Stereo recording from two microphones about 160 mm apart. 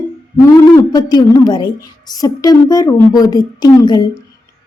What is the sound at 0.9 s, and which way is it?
A woman's voice, 25° left (ahead or behind).